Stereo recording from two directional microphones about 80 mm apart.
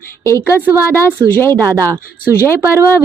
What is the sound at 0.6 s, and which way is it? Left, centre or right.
Speech, right.